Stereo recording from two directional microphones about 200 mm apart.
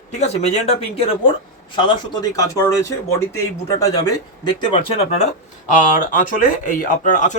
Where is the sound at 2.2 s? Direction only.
15° left (ahead or behind).